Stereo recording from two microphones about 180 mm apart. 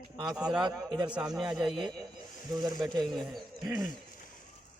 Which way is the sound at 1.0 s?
5° right (ahead or behind).